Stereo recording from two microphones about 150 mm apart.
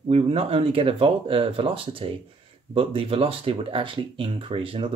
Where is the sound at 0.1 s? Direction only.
40° right (ahead or behind).